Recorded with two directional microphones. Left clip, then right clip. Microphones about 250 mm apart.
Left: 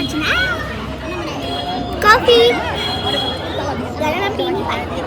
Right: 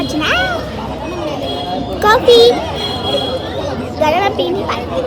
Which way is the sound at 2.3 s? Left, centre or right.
Right.